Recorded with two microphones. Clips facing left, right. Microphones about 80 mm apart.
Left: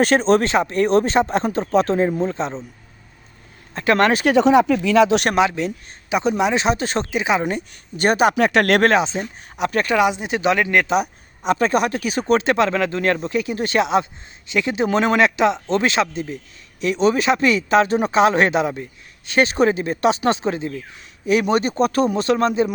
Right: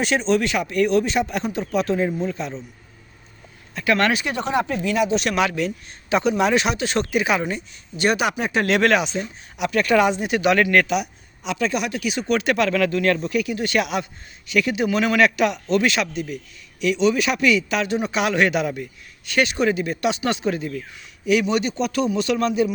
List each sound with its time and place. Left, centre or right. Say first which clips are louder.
0.0 s speech: left 5 dB; left
3.8 s speech: left 3 dB; left
4.3 s speech: left 9 dB; left
5.4 s speech: left 3 dB; left
6.7 s speech: even; left
7.1 s speech: left 2 dB; left
7.4 s speech: left 4 dB; left
8.4 s speech: left 5 dB; left
8.8 s speech: left 2 dB; left
9.9 s speech: right 1 dB; centre
10.2 s speech: right 1 dB; left
10.8 s speech: left 4 dB; left
21.4 s speech: left 4 dB; left